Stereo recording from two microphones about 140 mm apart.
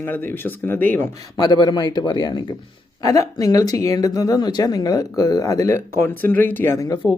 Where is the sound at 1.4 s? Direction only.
30° left (ahead or behind).